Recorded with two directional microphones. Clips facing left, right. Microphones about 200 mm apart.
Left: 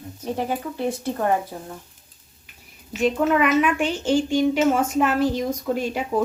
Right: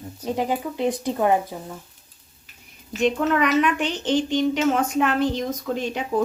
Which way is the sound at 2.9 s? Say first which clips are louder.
Left 1 dB; 5° left (ahead or behind).